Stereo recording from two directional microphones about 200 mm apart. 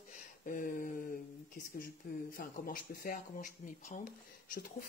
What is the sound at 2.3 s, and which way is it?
Speech, 45° left (ahead or behind).